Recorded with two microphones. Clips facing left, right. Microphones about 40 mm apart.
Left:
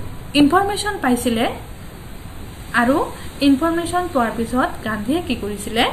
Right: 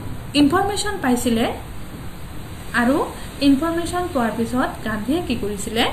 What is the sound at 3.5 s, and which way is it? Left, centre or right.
Speech, left.